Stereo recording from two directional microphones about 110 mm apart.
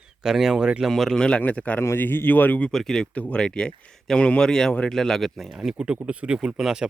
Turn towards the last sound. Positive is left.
turn(degrees=-5)  # may be behind; listen again after turning